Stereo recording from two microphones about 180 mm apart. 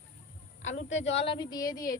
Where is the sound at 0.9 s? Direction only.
40° left (ahead or behind); by 2.0 s 20° left (ahead or behind).